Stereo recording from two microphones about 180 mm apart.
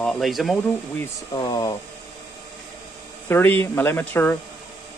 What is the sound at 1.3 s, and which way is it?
Speech, 25° left (ahead or behind).